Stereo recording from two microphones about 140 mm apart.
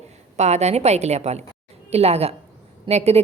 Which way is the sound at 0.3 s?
55° right (ahead or behind).